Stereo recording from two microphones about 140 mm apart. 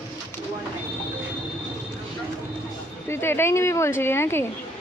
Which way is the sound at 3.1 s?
15° left (ahead or behind).